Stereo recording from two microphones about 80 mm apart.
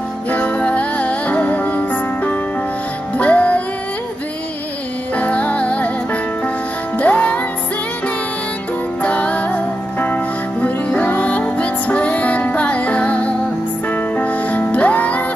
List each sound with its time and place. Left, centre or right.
0.3 s music: centre
5.1 s music: centre
7.0 s music: centre
9.0 s music: centre